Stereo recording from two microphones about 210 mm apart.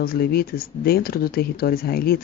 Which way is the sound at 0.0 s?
45° left (ahead or behind).